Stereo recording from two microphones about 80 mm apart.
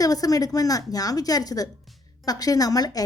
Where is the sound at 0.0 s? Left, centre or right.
Left.